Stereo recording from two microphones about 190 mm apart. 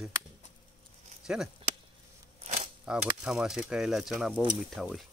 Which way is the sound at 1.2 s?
5° right (ahead or behind).